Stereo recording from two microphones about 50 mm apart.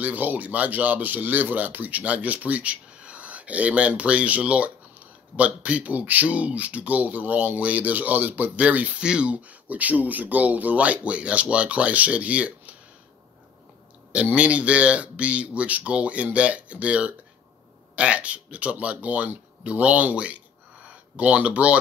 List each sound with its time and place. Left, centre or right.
0.0 s speech: right
14.3 s speech: right